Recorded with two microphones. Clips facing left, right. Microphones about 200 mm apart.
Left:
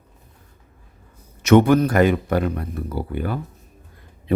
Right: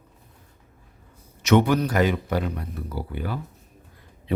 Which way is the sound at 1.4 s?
50° left (ahead or behind).